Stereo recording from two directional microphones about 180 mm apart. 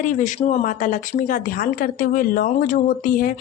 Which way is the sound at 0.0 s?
45° left (ahead or behind).